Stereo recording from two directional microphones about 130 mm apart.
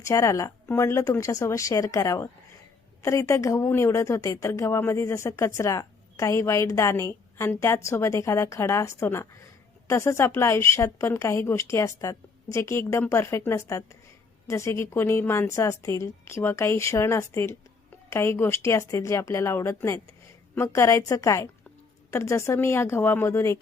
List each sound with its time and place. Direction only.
0.0 s a woman's voice: 25° left (ahead or behind)